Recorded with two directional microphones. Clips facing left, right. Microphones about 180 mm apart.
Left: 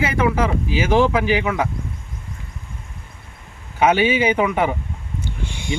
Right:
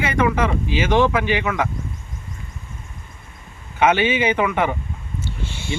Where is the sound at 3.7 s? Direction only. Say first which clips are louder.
Left 1 dB; 10° left (ahead or behind).